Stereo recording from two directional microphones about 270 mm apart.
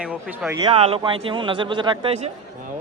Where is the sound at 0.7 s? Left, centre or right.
Right.